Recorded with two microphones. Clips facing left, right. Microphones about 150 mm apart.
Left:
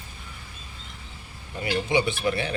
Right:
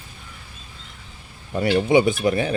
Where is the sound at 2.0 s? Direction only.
40° right (ahead or behind).